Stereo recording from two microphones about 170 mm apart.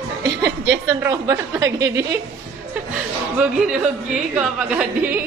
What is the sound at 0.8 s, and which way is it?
A woman's voice, 20° right (ahead or behind).